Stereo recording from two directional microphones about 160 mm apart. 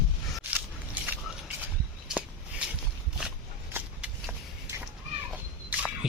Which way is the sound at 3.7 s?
10° right (ahead or behind).